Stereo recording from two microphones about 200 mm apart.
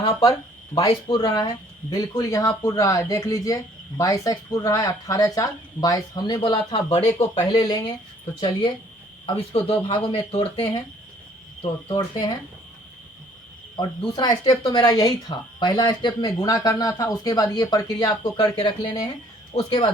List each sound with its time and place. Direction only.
0.3 s speech: 20° left (ahead or behind)
13.7 s speech: 20° left (ahead or behind)